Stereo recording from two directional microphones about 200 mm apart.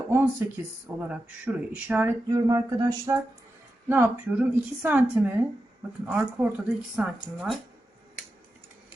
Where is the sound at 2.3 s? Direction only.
20° right (ahead or behind).